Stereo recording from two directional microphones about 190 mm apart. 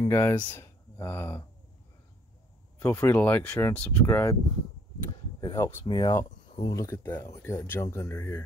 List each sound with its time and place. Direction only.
0.1 s speech: 10° left (ahead or behind)
2.8 s speech: 10° left (ahead or behind)
5.4 s speech: 20° left (ahead or behind)